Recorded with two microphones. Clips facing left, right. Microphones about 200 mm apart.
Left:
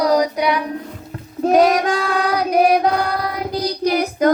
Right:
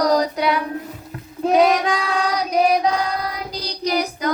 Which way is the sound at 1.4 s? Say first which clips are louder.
Left 2 dB; 45° left (ahead or behind).